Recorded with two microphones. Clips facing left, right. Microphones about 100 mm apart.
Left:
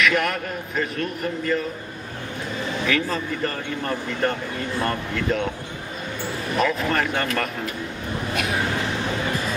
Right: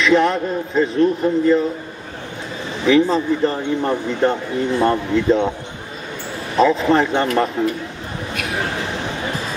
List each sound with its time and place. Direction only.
0.0 s a man's voice: 25° right (ahead or behind)
2.9 s a man's voice: 25° right (ahead or behind)
6.5 s a man's voice: 25° right (ahead or behind)